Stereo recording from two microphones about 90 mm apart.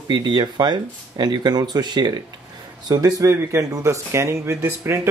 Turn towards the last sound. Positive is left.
turn(degrees=-25)  # may be behind; listen again after turning